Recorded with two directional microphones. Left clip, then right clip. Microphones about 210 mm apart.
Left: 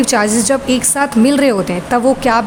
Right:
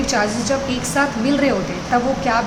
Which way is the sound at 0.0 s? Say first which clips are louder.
Left 6 dB; 55° left (ahead or behind).